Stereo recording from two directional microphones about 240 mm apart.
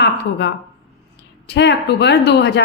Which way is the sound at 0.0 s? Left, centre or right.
Left.